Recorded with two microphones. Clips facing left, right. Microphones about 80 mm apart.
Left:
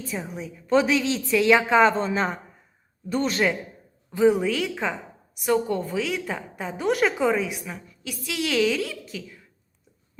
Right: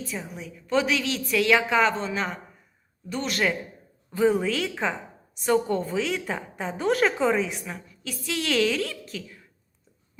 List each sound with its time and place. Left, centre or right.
0.1 s a woman's voice: centre
0.3 s a woman's voice: left
4.1 s a woman's voice: centre
4.4 s a woman's voice: centre